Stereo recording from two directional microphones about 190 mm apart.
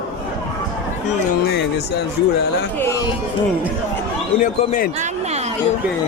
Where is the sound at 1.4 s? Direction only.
60° left (ahead or behind).